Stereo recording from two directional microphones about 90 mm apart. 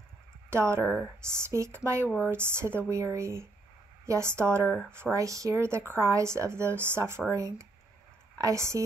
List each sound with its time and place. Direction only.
0.5 s speech: 30° right (ahead or behind)
0.8 s speech: 20° left (ahead or behind)
1.2 s a woman's voice: 30° right (ahead or behind)